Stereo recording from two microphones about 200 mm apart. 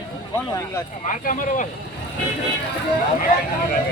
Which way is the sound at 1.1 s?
40° left (ahead or behind).